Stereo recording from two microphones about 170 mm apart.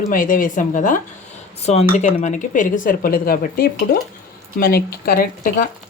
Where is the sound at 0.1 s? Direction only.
55° left (ahead or behind).